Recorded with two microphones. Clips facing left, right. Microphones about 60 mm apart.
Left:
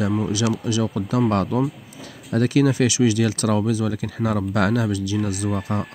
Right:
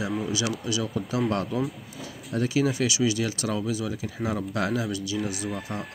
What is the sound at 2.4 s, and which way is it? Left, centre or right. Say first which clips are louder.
Speech: left 6 dB; left.